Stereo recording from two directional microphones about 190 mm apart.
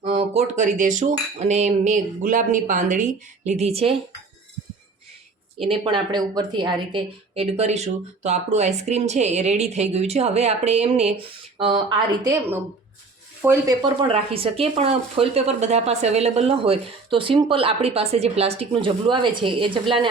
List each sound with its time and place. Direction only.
0.0 s a woman's voice: 30° right (ahead or behind)
5.6 s a woman's voice: 25° right (ahead or behind)
14.1 s a woman's voice: 30° right (ahead or behind)